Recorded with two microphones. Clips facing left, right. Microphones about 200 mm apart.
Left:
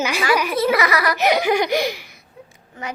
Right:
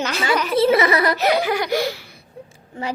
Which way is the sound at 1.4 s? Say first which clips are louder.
Left 2 dB; 15° left (ahead or behind).